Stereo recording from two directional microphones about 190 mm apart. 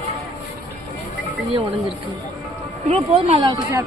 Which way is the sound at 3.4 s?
15° right (ahead or behind).